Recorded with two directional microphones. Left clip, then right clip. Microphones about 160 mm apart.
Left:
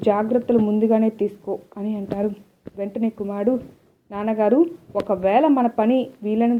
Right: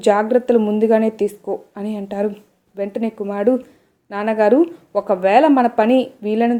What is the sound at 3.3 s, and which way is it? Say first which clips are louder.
Speech: right 6 dB; 35° right (ahead or behind).